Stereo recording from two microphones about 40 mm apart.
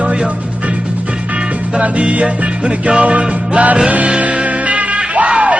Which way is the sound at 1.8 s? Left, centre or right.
Right.